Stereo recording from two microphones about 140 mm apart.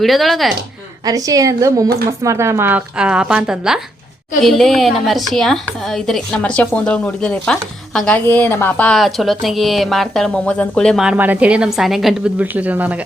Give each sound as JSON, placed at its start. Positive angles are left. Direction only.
{"t": 0.0, "sound": "speech", "side_deg": 0}
{"t": 1.0, "sound": "a woman's voice", "side_deg": -25}
{"t": 8.9, "sound": "speech", "side_deg": 0}